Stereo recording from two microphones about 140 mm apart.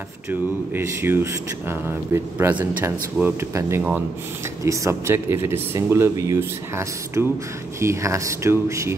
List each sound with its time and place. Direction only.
0.3 s speech: 15° right (ahead or behind)